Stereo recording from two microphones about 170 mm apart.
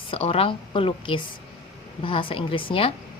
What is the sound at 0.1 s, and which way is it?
A woman's voice, 35° left (ahead or behind).